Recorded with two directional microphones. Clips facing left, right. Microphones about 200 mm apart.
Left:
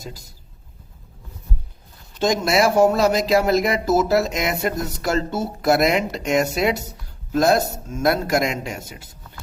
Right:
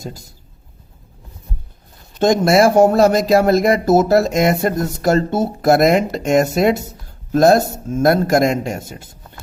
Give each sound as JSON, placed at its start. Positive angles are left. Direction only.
{"t": 2.1, "sound": "speech", "side_deg": -50}